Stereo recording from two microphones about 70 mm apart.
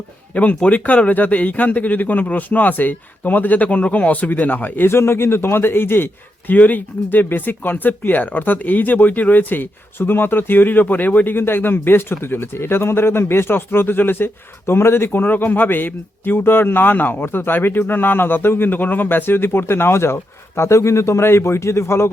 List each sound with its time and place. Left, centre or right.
0.3 s speech: left